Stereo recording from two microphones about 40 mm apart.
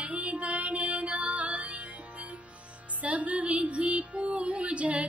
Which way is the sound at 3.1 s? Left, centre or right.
Right.